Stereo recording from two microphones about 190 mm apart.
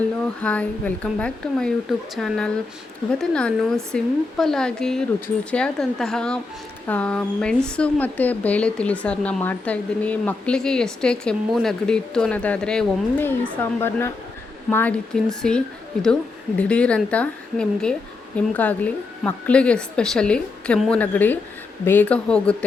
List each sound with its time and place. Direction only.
0.4 s a woman's voice: 5° left (ahead or behind)